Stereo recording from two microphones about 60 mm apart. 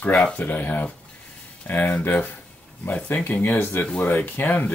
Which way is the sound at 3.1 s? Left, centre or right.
Left.